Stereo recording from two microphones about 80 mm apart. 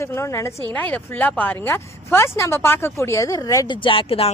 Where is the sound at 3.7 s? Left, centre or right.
Left.